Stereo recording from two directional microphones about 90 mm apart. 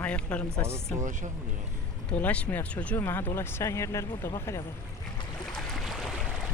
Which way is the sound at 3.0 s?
30° left (ahead or behind).